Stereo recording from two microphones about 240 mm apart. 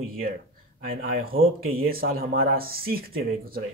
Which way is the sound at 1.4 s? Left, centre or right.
Right.